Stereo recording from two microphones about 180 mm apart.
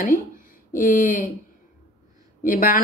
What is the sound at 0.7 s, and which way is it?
Speech, 50° left (ahead or behind).